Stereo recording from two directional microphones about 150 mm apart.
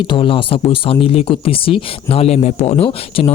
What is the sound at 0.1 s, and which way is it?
Speech, 35° left (ahead or behind).